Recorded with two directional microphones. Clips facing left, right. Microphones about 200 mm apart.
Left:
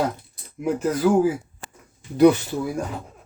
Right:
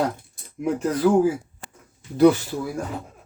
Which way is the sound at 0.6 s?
5° left (ahead or behind).